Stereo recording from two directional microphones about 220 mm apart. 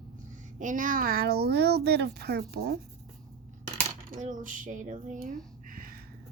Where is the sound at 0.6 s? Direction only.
35° right (ahead or behind).